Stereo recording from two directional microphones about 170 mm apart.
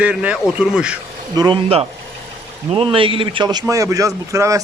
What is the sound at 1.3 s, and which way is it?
Speech, 25° right (ahead or behind).